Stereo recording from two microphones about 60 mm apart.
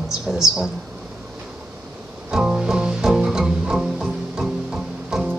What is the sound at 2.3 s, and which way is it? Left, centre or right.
Music, centre.